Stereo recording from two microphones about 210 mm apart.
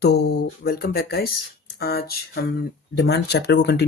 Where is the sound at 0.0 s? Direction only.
50° left (ahead or behind).